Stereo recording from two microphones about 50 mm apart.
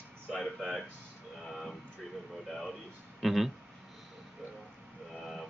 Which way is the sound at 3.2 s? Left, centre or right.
Centre.